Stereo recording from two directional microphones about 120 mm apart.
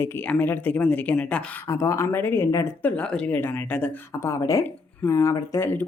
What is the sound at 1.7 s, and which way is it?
Speech, 25° left (ahead or behind).